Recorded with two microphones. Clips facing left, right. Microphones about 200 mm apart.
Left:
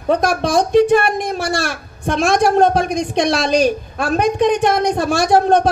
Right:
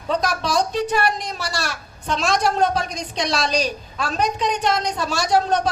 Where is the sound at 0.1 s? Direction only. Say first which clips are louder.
Left 6 dB; 55° left (ahead or behind).